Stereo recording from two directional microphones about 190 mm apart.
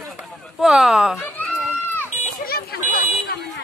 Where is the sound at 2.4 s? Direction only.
55° left (ahead or behind).